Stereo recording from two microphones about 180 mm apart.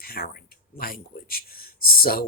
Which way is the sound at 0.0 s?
55° left (ahead or behind).